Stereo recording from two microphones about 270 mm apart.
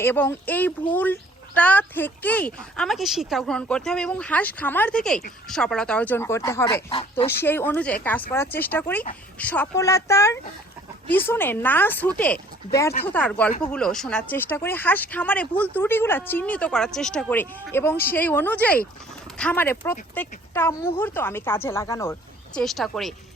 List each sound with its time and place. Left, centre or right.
0.0 s speech: centre
6.9 s speech: left
7.3 s speech: centre